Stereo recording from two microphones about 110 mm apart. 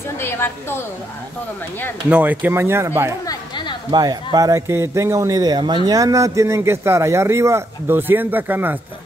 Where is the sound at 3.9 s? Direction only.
35° right (ahead or behind); by 8.8 s 15° right (ahead or behind).